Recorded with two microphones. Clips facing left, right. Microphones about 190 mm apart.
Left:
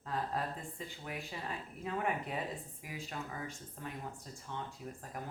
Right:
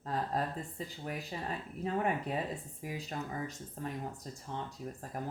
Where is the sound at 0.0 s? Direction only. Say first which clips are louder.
Right 3 dB; 35° right (ahead or behind).